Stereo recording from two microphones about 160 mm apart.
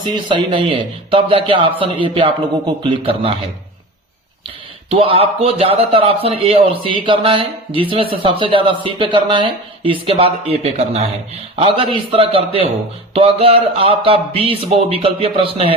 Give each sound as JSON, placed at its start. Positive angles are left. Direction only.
{"t": 0.1, "sound": "speech", "side_deg": -30}
{"t": 4.4, "sound": "speech", "side_deg": -35}